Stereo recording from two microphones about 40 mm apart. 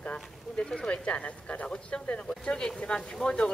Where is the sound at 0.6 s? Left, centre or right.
Centre.